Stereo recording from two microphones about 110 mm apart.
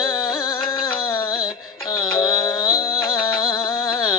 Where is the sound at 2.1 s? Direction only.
40° left (ahead or behind).